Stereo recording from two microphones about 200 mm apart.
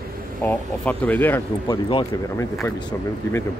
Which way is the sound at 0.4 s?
10° left (ahead or behind).